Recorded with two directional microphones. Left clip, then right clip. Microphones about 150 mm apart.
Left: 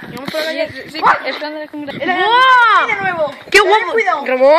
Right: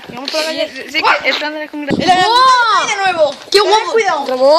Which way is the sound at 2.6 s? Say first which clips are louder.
Left 2 dB; 90° left.